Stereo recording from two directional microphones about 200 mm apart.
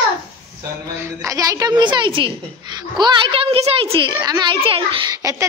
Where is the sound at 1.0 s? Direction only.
15° right (ahead or behind).